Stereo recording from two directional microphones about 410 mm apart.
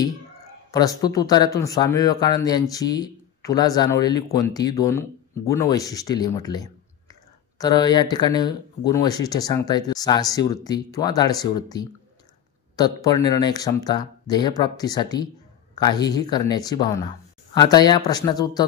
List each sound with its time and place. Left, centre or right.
0.7 s speech: centre